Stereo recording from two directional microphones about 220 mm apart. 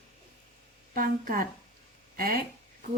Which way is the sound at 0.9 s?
40° right (ahead or behind).